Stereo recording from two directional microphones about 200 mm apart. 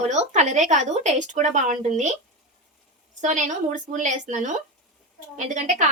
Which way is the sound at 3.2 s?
40° right (ahead or behind).